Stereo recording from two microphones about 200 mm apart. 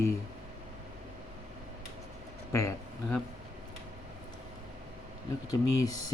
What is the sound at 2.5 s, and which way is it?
Speech, 15° left (ahead or behind).